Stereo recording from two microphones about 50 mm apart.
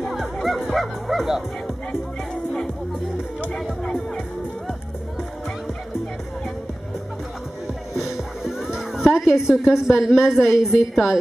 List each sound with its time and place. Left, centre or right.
0.2 s music: centre
1.9 s music: centre
3.8 s music: centre
7.6 s music: centre